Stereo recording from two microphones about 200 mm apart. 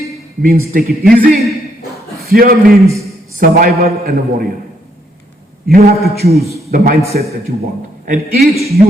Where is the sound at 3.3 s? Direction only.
45° right (ahead or behind).